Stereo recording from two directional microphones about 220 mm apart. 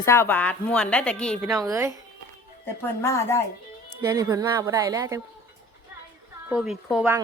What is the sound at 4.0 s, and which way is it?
A woman's voice, 15° right (ahead or behind).